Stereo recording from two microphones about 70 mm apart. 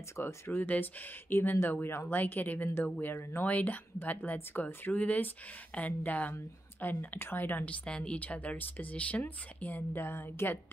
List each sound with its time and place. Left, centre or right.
0.2 s speech: left
3.2 s speech: left
3.4 s speech: left